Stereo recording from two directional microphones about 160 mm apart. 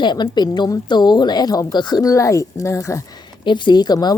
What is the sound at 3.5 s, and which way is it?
Speech, 30° left (ahead or behind).